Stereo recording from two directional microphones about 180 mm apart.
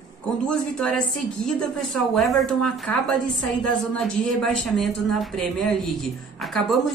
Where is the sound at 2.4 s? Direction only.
5° left (ahead or behind).